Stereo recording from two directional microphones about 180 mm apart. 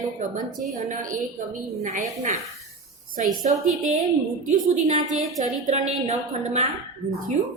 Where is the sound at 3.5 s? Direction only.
40° right (ahead or behind).